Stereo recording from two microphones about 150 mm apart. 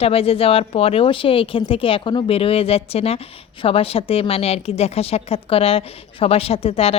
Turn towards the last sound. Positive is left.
turn(degrees=40)  # may be behind; listen again after turning